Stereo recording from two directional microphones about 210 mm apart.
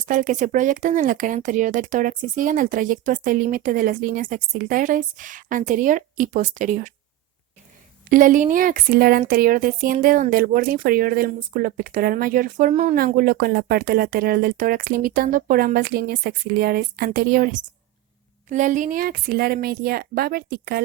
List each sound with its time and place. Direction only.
0.1 s speech: 40° right (ahead or behind)
8.1 s speech: 40° right (ahead or behind)